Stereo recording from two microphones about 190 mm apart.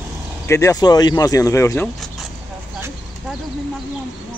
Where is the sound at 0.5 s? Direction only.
15° left (ahead or behind).